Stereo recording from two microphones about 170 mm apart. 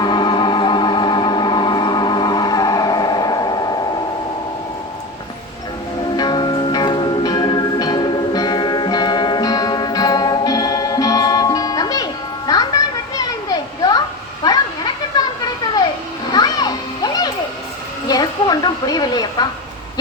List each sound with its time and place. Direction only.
0.0 s music: 25° left (ahead or behind)
6.1 s music: 25° left (ahead or behind)
12.5 s children playing: 20° left (ahead or behind)
18.1 s a sound: 25° left (ahead or behind)